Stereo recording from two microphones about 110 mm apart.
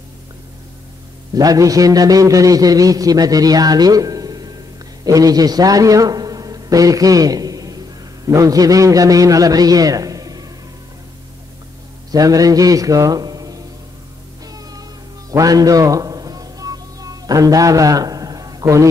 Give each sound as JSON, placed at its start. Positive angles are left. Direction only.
{"t": 1.3, "sound": "a man's voice", "side_deg": -35}
{"t": 12.1, "sound": "a man's voice", "side_deg": -35}
{"t": 14.4, "sound": "music", "side_deg": -35}
{"t": 15.3, "sound": "a sound", "side_deg": -35}